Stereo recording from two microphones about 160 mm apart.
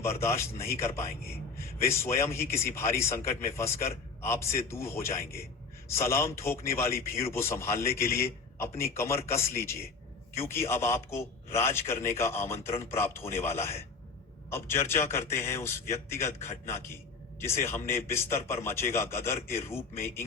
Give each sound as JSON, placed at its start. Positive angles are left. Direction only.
{"t": 0.0, "sound": "a man's voice", "side_deg": 15}